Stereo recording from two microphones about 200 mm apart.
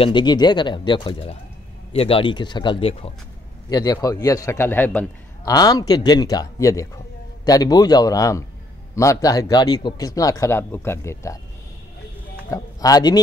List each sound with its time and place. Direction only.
0.0 s a man's voice: 20° left (ahead or behind)
12.4 s speech: 15° left (ahead or behind)